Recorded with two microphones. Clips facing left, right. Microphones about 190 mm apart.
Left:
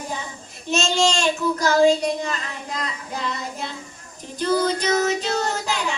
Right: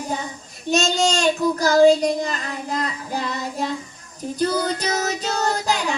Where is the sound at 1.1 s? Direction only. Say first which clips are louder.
Right 3 dB; 35° right (ahead or behind).